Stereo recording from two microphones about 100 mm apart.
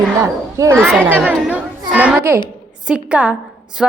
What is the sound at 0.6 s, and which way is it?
Speech, 30° right (ahead or behind).